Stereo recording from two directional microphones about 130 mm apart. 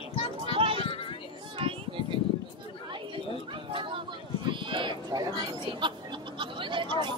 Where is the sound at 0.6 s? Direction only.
45° right (ahead or behind).